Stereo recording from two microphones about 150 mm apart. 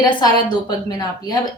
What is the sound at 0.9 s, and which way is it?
Speech, 25° left (ahead or behind).